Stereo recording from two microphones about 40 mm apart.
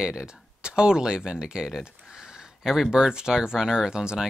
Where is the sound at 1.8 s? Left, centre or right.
Centre.